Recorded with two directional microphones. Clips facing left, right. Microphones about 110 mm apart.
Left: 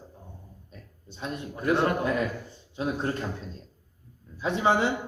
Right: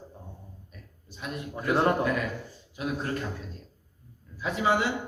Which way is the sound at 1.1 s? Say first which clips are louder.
Left 1 dB; 30° left (ahead or behind).